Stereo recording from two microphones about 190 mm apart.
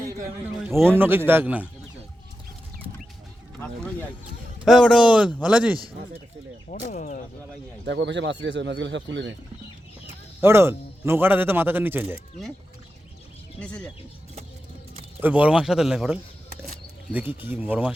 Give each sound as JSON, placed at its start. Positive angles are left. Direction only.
{"t": 0.1, "sound": "a man's voice", "side_deg": -15}
{"t": 0.6, "sound": "a man's voice", "side_deg": -5}
{"t": 4.6, "sound": "a man's voice", "side_deg": 0}
{"t": 6.7, "sound": "speech", "side_deg": 40}
{"t": 7.9, "sound": "speech", "side_deg": -70}
{"t": 10.4, "sound": "a man's voice", "side_deg": -15}
{"t": 13.6, "sound": "speech", "side_deg": 5}
{"t": 15.2, "sound": "a man's voice", "side_deg": -5}